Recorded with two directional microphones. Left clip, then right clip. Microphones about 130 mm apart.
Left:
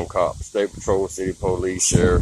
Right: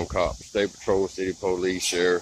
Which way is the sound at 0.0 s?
Centre (ahead or behind).